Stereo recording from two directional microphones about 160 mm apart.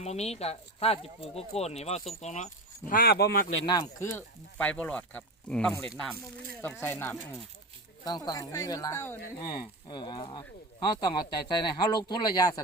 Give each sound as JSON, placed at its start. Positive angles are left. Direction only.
{"t": 0.0, "sound": "speech", "side_deg": 40}
{"t": 2.9, "sound": "speech", "side_deg": 75}
{"t": 3.7, "sound": "speech", "side_deg": 20}
{"t": 8.0, "sound": "speech", "side_deg": 25}
{"t": 9.4, "sound": "speech", "side_deg": 30}